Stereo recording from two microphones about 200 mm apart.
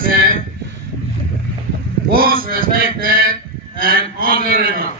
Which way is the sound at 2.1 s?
45° right (ahead or behind).